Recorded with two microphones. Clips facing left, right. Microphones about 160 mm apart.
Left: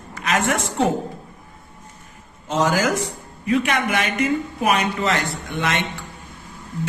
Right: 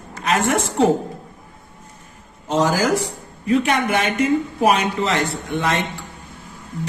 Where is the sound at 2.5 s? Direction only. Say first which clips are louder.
Right 2 dB; 35° right (ahead or behind).